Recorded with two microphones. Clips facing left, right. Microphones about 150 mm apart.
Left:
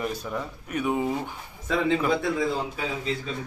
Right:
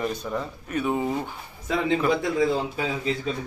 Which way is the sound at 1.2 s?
15° right (ahead or behind).